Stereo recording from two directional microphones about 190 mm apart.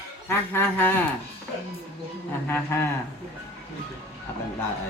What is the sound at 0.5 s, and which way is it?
Speech, 10° left (ahead or behind).